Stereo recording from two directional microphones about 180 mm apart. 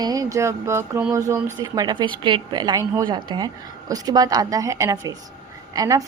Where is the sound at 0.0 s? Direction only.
20° right (ahead or behind).